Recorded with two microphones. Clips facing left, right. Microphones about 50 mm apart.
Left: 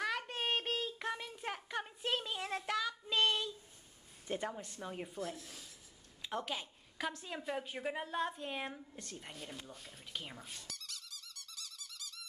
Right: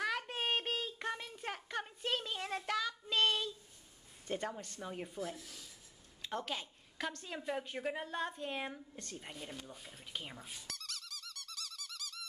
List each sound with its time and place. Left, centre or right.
0.0 s child singing: centre
4.3 s a woman's voice: centre
10.7 s squeak: right